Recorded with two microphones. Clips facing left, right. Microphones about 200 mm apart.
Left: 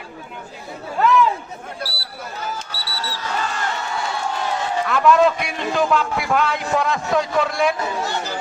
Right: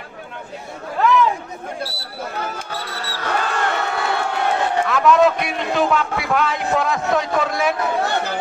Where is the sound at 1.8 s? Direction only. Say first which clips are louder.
Right 2 dB; 25° right (ahead or behind).